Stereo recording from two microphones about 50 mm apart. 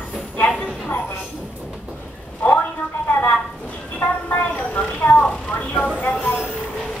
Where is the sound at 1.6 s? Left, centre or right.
Centre.